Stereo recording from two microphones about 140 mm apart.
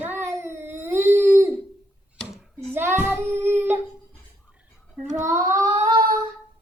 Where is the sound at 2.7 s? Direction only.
15° right (ahead or behind).